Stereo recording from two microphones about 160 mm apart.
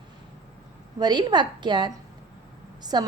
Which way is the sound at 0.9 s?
25° right (ahead or behind).